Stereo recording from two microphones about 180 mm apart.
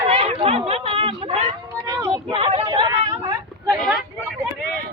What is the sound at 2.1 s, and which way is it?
Vehicle, 30° right (ahead or behind).